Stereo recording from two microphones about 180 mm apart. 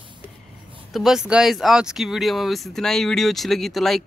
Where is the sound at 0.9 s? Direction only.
Centre (ahead or behind).